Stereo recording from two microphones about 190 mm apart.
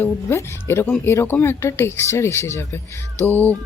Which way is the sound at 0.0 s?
15° left (ahead or behind).